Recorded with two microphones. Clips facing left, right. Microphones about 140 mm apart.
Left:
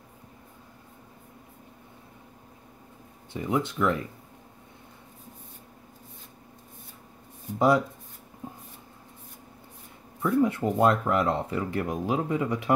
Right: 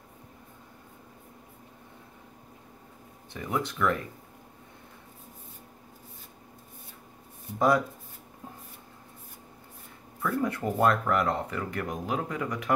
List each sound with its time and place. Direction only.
3.3 s speech: 20° left (ahead or behind)
7.5 s speech: 20° left (ahead or behind)
10.2 s speech: 25° left (ahead or behind)